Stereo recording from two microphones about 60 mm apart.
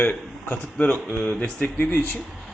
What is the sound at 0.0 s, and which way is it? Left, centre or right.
A man's voice, left.